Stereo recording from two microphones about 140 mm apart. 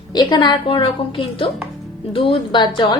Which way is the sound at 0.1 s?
30° left (ahead or behind).